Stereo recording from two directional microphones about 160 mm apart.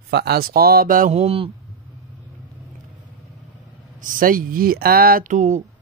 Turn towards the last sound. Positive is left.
turn(degrees=-50)  # may be behind; listen again after turning